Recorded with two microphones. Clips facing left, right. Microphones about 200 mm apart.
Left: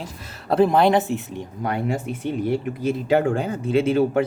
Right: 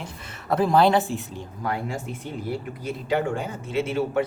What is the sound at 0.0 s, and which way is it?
A man's voice, 30° left (ahead or behind).